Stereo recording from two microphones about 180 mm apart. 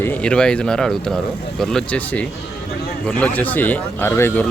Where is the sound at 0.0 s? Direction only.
10° left (ahead or behind).